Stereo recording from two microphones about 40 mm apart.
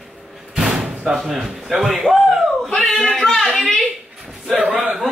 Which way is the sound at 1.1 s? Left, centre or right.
Centre.